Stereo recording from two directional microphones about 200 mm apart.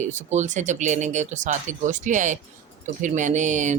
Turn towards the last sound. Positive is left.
turn(degrees=-40)  # may be behind; listen again after turning